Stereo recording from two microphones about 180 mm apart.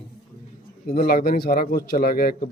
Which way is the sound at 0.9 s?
55° left (ahead or behind).